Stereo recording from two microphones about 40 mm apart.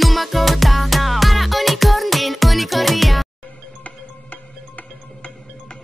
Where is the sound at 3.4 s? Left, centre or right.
Left.